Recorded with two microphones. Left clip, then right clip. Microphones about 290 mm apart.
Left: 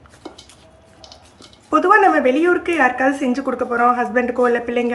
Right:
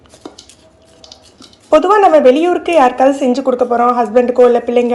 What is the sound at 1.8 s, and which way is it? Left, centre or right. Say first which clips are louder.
Speech: right 4 dB; centre.